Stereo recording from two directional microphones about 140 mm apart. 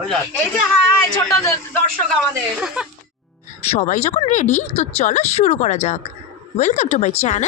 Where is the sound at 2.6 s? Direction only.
5° right (ahead or behind).